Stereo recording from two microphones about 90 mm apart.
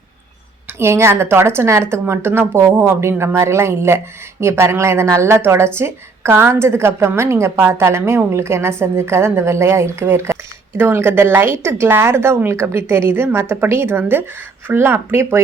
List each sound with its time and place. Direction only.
0.8 s speech: 30° right (ahead or behind)